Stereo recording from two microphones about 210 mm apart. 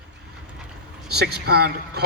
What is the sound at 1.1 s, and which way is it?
Speech, 50° right (ahead or behind).